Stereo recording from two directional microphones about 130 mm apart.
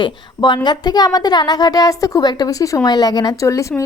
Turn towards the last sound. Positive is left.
turn(degrees=25)  # may be behind; listen again after turning